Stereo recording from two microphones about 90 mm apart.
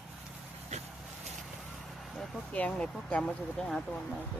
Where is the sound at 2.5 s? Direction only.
15° left (ahead or behind).